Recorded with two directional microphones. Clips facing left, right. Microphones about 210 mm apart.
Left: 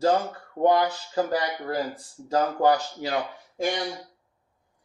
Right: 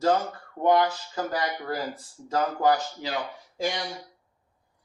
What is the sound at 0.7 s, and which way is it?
Speech, 30° left (ahead or behind).